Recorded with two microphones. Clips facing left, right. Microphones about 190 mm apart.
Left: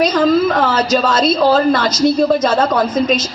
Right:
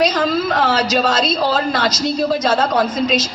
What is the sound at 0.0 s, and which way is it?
A woman's voice, 50° left (ahead or behind).